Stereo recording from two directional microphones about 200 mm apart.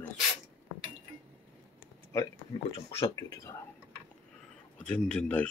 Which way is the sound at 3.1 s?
15° left (ahead or behind).